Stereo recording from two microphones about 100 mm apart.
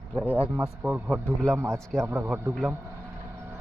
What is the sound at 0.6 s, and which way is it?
Speech, 15° right (ahead or behind).